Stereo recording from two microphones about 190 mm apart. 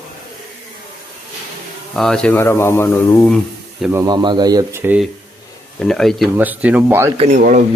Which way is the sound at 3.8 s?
15° right (ahead or behind).